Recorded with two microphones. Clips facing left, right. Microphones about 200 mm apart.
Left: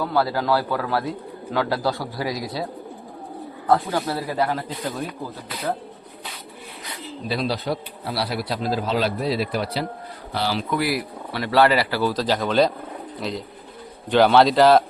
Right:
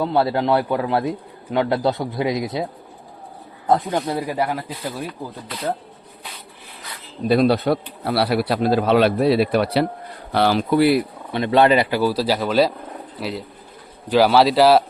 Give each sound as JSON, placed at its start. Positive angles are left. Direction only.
{"t": 0.0, "sound": "speech", "side_deg": -25}
{"t": 3.7, "sound": "speech", "side_deg": -20}
{"t": 7.3, "sound": "a man's voice", "side_deg": -55}
{"t": 10.7, "sound": "a man's voice", "side_deg": -30}